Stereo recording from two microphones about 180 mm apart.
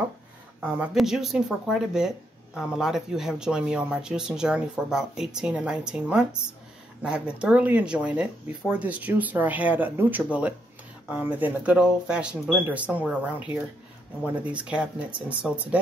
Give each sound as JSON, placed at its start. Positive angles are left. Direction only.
{"t": 0.7, "sound": "speech", "side_deg": -5}